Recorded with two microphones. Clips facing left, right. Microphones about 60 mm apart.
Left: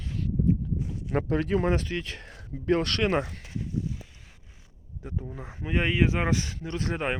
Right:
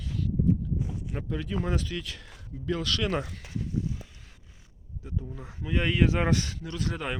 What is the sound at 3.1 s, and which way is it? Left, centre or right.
Speech, left.